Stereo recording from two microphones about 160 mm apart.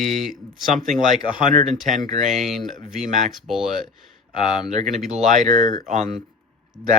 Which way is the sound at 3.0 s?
50° right (ahead or behind).